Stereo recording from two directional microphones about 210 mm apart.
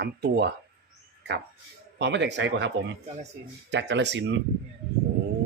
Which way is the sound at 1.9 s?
55° right (ahead or behind).